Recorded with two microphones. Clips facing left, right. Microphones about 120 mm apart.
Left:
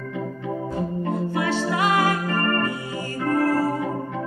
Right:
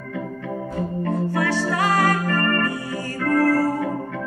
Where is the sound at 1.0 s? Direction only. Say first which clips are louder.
Right 3 dB; 15° left (ahead or behind).